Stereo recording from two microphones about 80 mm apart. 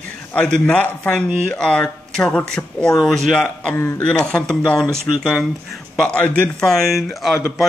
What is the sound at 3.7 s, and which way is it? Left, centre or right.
Speech, left.